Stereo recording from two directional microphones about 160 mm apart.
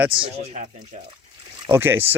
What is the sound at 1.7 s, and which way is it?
Speech, 15° right (ahead or behind).